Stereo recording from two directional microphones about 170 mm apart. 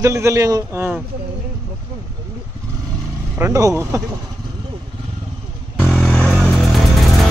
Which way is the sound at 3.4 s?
20° right (ahead or behind).